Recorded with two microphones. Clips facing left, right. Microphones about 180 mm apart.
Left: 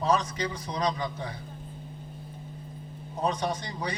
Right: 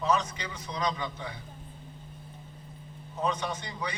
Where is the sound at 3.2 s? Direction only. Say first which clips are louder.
Left 2 dB; 35° left (ahead or behind).